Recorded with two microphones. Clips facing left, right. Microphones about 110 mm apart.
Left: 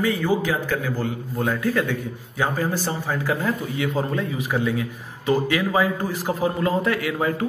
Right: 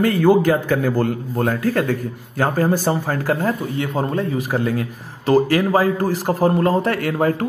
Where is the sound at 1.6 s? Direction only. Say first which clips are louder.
Right 3 dB; 40° right (ahead or behind); by 4.0 s 55° right (ahead or behind).